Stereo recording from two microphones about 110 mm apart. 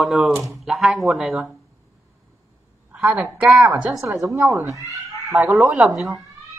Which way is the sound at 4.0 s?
30° right (ahead or behind).